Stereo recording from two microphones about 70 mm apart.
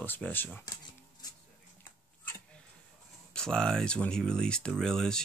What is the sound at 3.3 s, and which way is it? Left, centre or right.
Speech, centre.